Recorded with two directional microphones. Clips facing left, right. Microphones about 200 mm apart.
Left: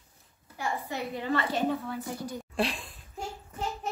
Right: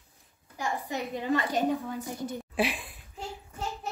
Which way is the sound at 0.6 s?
15° right (ahead or behind).